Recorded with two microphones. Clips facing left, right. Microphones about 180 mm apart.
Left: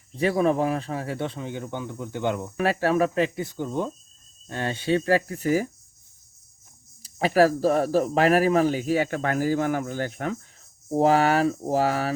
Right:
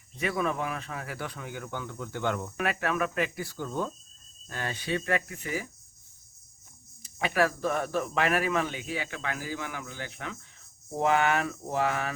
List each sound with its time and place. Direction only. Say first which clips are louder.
0.2 s speech: left 8 dB; 30° left (ahead or behind)
2.6 s speech: left 10 dB; 30° left (ahead or behind)
7.0 s speech: left 8 dB; 35° left (ahead or behind)
10.9 s speech: left 6 dB; 35° left (ahead or behind)